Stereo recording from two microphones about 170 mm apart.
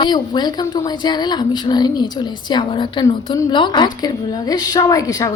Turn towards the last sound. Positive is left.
turn(degrees=20)  # may be behind; listen again after turning